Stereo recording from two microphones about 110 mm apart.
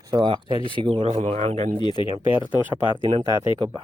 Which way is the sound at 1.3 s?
70° right (ahead or behind).